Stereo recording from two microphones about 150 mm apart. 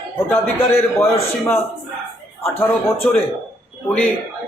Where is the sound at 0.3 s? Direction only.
15° left (ahead or behind).